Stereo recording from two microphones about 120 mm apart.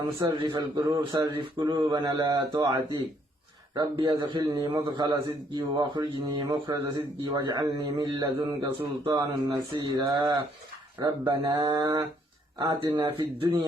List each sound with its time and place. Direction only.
0.3 s a man's voice: 40° right (ahead or behind)
12.5 s a man's voice: 45° right (ahead or behind)